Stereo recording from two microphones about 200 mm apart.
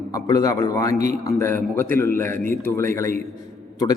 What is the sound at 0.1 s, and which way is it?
A man's voice, 15° left (ahead or behind).